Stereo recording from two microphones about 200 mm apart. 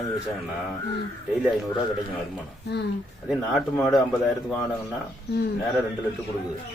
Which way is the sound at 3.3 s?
Centre (ahead or behind).